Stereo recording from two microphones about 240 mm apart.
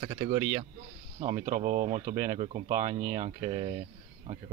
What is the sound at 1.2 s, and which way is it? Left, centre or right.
Speech, right.